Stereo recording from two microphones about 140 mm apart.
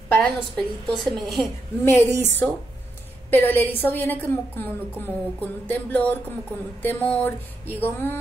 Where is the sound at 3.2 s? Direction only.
15° left (ahead or behind).